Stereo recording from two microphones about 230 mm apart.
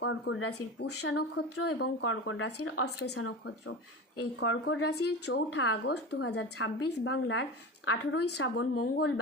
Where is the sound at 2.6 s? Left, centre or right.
Left.